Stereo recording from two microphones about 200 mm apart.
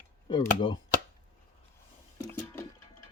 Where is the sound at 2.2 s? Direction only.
15° left (ahead or behind).